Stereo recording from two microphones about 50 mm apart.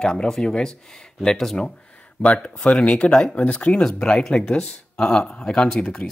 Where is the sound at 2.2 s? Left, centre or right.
Left.